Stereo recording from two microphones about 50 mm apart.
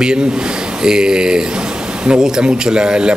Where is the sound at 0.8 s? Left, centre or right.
Centre.